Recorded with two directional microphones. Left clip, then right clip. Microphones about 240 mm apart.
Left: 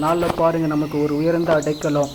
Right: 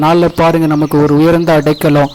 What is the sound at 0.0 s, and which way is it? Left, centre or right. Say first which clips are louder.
A man's voice: right 8 dB; right.